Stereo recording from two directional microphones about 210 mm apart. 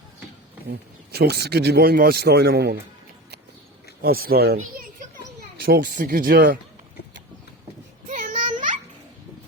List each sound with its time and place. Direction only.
0.7 s speech: 50° right (ahead or behind)
4.0 s speech: 45° right (ahead or behind)
5.6 s speech: 45° right (ahead or behind)
8.0 s a sound: 35° right (ahead or behind)